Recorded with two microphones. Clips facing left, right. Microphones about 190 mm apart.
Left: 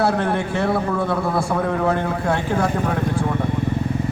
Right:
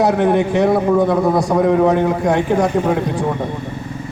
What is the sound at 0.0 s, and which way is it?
A man's voice, 15° right (ahead or behind).